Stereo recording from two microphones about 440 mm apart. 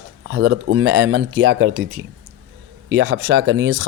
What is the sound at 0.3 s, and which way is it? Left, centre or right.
Speech, right.